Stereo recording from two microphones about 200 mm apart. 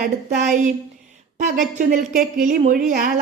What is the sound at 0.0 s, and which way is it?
A woman's voice, 35° right (ahead or behind).